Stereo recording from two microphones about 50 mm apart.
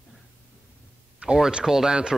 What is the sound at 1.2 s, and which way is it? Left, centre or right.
Speech, centre.